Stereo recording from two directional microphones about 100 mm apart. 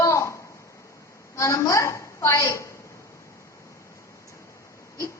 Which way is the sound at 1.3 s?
30° left (ahead or behind).